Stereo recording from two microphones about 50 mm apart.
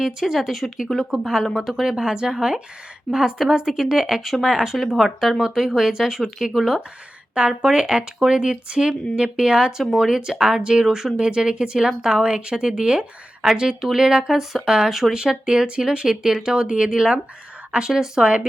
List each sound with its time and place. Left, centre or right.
0.0 s a woman's voice: centre
1.1 s a woman's voice: centre
7.3 s a woman's voice: centre
9.8 s speech: centre
10.1 s a woman's voice: centre